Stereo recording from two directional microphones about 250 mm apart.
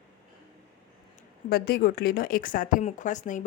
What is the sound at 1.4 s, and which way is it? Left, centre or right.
Speech, left.